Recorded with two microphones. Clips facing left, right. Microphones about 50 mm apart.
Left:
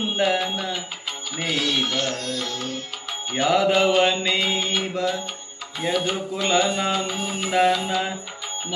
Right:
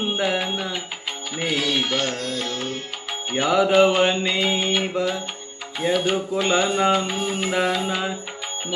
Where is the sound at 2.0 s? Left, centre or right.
Right.